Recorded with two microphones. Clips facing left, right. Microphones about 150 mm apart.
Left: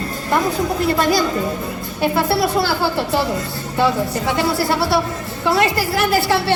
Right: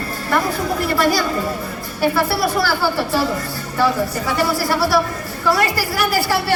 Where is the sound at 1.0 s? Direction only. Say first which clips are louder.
Left 1 dB; 20° left (ahead or behind).